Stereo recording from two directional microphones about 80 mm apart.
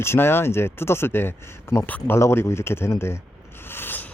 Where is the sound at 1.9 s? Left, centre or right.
Centre.